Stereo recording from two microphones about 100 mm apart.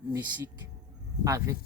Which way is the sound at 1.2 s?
35° right (ahead or behind).